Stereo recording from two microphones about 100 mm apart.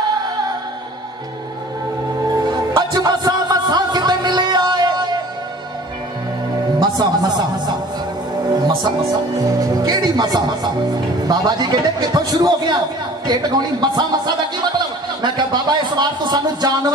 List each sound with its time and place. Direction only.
2.4 s music: 45° right (ahead or behind)
6.8 s speech: 45° right (ahead or behind)
9.6 s speech: 45° right (ahead or behind)